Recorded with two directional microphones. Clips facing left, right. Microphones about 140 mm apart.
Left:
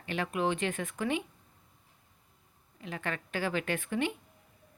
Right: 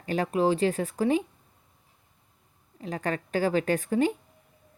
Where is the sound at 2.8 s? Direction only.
40° right (ahead or behind).